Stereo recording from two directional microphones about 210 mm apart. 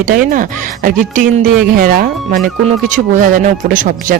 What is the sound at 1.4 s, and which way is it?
A woman's voice, 40° right (ahead or behind).